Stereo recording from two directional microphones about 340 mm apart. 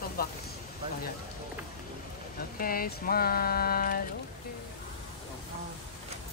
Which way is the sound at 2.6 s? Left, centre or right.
Left.